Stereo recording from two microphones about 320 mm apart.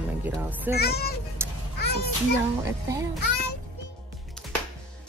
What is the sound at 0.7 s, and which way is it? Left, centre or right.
Speech, left.